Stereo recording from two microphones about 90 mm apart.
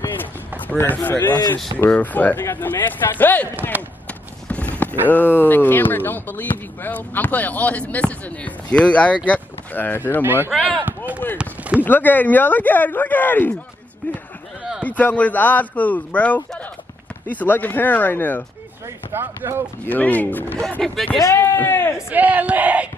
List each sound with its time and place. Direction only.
0.0 s speech: 25° left (ahead or behind)
3.7 s speech: 20° right (ahead or behind)
4.5 s clip-clop: 15° left (ahead or behind)
5.1 s speech: 20° left (ahead or behind)
10.2 s speech: 25° right (ahead or behind)
11.8 s speech: 20° left (ahead or behind)
14.8 s speech: 15° left (ahead or behind)
19.1 s speech: 25° right (ahead or behind)
19.9 s speech: 20° left (ahead or behind)
20.8 s speech: 5° left (ahead or behind)
21.2 s speech: 30° left (ahead or behind)
22.1 s speech: 20° right (ahead or behind)